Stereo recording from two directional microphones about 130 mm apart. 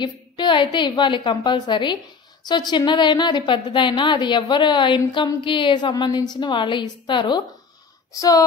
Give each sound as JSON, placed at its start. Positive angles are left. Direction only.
{"t": 0.0, "sound": "a woman's voice", "side_deg": 35}